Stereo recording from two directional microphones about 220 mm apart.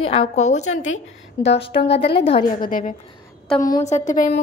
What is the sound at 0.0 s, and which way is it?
A woman's voice, 25° left (ahead or behind).